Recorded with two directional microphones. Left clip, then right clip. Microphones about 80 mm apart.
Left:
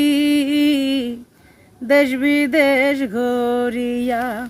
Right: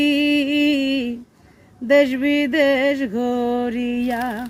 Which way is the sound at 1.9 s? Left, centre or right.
Left.